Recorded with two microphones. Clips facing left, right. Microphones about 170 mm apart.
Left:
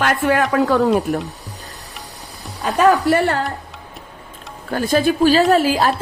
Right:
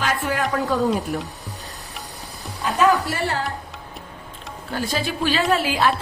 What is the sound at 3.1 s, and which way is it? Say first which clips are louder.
Speech: left 9 dB; 60° left (ahead or behind).